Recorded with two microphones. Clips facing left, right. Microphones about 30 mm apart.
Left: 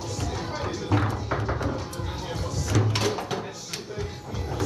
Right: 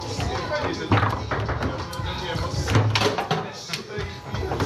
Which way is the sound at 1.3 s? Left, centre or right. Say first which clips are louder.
Right 1 dB; right.